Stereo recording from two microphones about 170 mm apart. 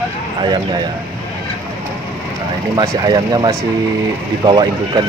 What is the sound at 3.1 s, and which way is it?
Speech, 25° right (ahead or behind).